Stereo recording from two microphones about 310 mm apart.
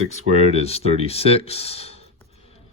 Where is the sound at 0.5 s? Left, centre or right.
Centre.